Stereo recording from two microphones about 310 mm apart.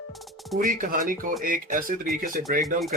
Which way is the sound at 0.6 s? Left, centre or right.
Right.